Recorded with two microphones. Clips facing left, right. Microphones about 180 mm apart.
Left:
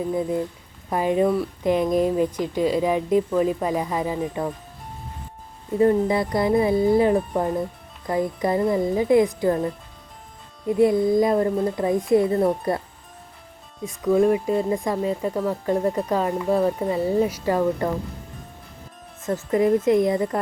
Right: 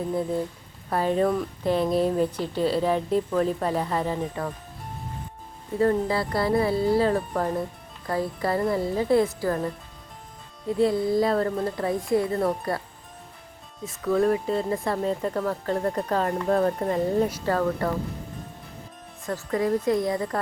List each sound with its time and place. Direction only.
0.1 s speech: 15° left (ahead or behind)
6.1 s a woman's voice: 20° left (ahead or behind)
10.7 s a woman's voice: 20° left (ahead or behind)
13.8 s speech: 15° left (ahead or behind)
19.2 s a woman's voice: 20° left (ahead or behind)